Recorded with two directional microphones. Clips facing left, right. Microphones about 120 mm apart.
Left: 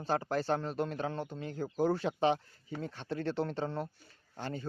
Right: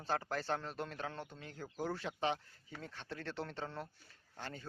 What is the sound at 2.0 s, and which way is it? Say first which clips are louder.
Speech: left 8 dB; 25° left (ahead or behind).